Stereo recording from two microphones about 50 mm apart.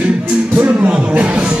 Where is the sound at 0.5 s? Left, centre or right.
Right.